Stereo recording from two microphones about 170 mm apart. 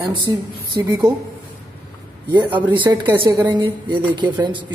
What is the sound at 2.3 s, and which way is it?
Speech, 25° right (ahead or behind).